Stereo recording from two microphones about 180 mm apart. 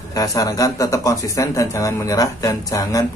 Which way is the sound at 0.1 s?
20° left (ahead or behind).